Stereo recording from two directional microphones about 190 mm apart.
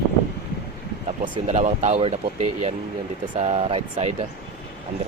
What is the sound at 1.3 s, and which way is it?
Speech, 35° right (ahead or behind).